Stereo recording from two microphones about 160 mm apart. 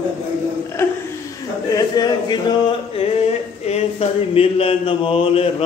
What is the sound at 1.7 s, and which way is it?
Speech, 25° left (ahead or behind).